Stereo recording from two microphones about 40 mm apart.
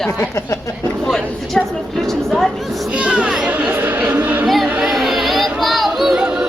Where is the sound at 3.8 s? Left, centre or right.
Right.